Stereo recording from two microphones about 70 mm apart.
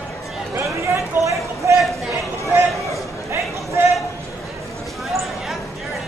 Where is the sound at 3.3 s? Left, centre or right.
Right.